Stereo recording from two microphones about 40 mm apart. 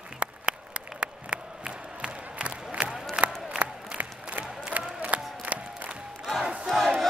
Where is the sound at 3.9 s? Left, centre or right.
Right.